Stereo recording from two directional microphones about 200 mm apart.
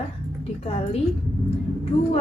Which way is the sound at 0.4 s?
30° left (ahead or behind).